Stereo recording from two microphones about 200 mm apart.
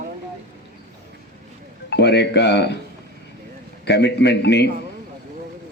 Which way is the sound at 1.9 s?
55° left (ahead or behind).